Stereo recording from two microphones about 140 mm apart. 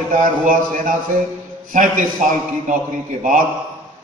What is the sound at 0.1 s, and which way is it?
A man's voice, 75° right (ahead or behind).